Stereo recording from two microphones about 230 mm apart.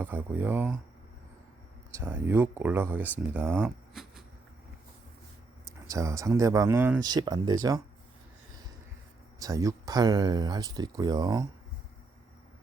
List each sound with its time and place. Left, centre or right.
0.0 s speech: centre
2.0 s speech: centre
5.9 s speech: centre
9.4 s speech: centre